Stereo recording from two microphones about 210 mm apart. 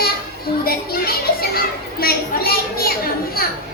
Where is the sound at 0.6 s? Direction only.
45° left (ahead or behind).